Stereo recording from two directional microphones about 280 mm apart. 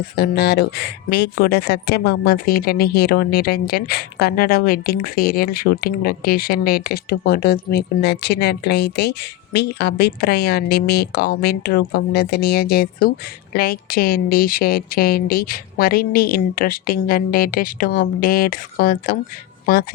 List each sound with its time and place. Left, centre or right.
0.0 s speech: left